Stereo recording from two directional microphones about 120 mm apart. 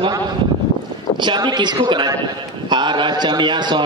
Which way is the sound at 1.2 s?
40° right (ahead or behind).